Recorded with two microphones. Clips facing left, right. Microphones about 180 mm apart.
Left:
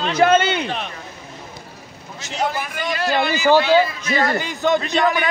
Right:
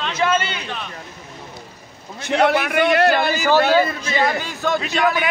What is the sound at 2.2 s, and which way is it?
A man's voice, 70° right (ahead or behind).